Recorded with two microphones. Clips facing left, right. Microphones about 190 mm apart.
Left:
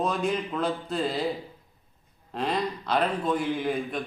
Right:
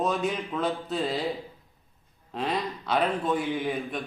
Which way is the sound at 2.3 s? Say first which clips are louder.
Left 1 dB; centre (ahead or behind).